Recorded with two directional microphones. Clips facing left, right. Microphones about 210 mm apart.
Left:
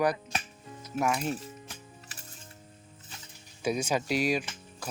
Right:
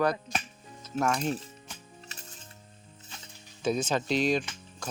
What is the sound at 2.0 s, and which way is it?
Music, 25° right (ahead or behind).